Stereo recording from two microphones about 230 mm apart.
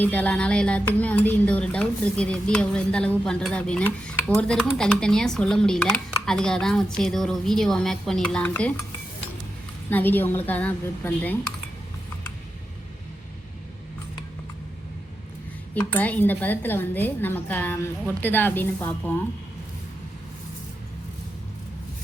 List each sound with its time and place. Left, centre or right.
0.0 s speech: centre
9.9 s a woman's voice: centre
15.7 s a woman's voice: centre